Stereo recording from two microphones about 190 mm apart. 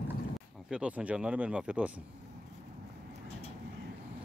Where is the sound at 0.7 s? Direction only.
5° right (ahead or behind).